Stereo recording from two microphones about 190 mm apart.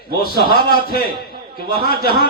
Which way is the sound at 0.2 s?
55° left (ahead or behind).